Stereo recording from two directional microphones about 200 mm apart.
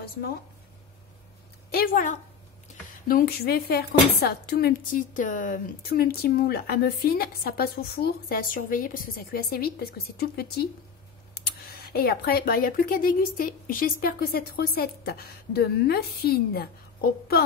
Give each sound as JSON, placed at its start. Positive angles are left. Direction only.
{"t": 1.7, "sound": "speech", "side_deg": 45}